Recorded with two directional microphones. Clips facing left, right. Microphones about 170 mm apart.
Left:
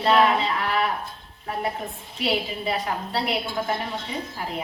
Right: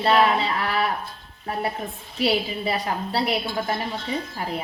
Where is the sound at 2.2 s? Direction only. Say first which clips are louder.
Right 3 dB; 35° right (ahead or behind).